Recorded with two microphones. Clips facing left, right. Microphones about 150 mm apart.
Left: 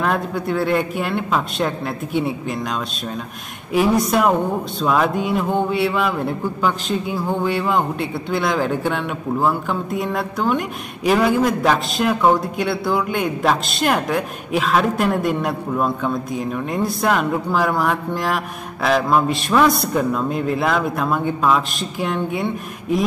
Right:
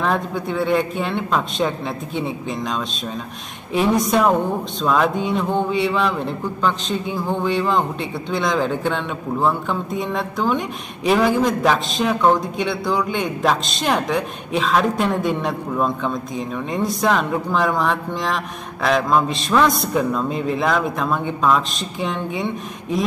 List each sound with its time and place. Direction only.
0.0 s a man's voice: centre (ahead or behind)
3.7 s a man's voice: 5° left (ahead or behind)